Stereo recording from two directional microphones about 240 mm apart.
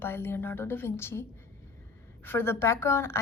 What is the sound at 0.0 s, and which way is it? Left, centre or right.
A woman's voice, centre.